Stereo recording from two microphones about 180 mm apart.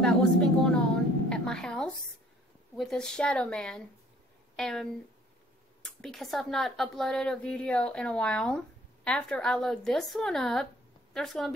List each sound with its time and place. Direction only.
0.0 s a woman's voice: 5° left (ahead or behind)
5.9 s speech: centre (ahead or behind)